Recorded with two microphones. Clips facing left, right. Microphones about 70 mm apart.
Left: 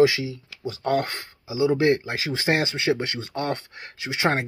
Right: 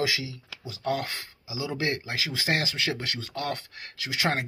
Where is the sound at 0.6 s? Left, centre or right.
Left.